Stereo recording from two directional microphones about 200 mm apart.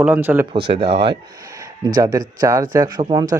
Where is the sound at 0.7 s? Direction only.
25° right (ahead or behind).